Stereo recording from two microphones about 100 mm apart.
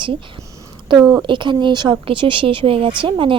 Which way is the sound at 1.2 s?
55° right (ahead or behind).